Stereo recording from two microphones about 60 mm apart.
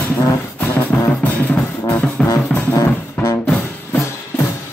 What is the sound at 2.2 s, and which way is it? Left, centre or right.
Music, centre.